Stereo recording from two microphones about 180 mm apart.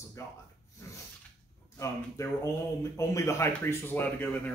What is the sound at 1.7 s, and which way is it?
Speech, 15° left (ahead or behind).